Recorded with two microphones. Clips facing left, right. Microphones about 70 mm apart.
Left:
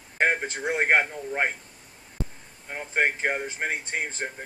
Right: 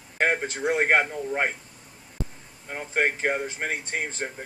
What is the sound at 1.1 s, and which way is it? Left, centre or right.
Speech, centre.